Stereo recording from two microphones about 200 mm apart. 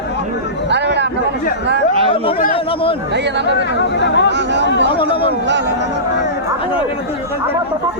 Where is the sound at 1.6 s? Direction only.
60° right (ahead or behind).